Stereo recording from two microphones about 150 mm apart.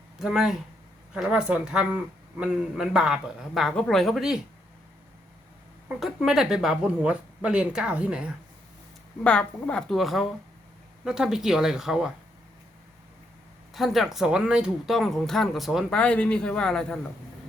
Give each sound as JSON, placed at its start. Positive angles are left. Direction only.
{"t": 0.2, "sound": "speech", "side_deg": -5}
{"t": 6.0, "sound": "speech", "side_deg": 0}
{"t": 9.2, "sound": "speech", "side_deg": 10}
{"t": 13.7, "sound": "speech", "side_deg": 0}
{"t": 16.0, "sound": "speech", "side_deg": 10}